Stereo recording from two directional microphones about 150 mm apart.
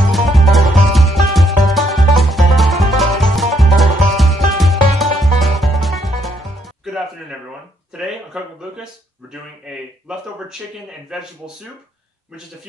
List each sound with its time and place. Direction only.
0.1 s music: centre (ahead or behind)
8.0 s a sound: 5° right (ahead or behind)
11.1 s speech: 5° right (ahead or behind)